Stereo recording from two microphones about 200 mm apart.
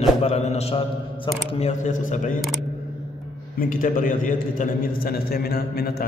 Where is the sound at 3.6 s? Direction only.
40° left (ahead or behind).